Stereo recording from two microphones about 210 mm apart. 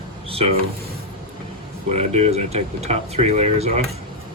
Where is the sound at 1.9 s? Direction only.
30° right (ahead or behind).